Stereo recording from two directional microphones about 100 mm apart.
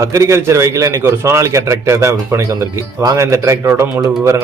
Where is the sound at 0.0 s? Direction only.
30° right (ahead or behind).